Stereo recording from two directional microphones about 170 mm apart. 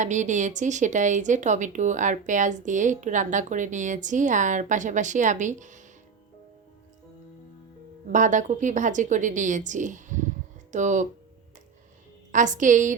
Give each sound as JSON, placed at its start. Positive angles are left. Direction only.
{"t": 0.0, "sound": "speech", "side_deg": -45}
{"t": 8.1, "sound": "speech", "side_deg": -45}
{"t": 12.3, "sound": "speech", "side_deg": -50}